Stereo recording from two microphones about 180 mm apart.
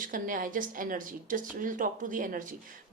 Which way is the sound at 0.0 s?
50° right (ahead or behind).